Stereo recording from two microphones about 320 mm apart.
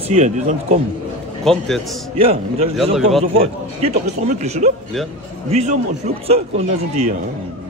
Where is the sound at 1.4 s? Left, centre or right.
Centre.